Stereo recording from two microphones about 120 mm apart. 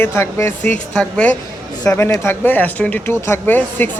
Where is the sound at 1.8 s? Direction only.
25° left (ahead or behind).